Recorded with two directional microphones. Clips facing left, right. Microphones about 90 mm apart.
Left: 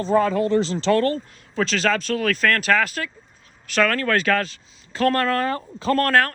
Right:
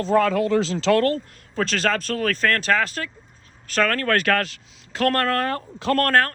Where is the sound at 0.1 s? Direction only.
75° right (ahead or behind).